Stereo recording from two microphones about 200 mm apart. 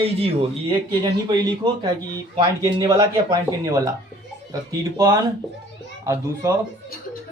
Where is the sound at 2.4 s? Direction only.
20° right (ahead or behind).